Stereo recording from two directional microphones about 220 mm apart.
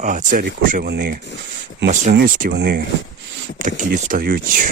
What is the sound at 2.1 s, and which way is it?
Speech, 40° right (ahead or behind).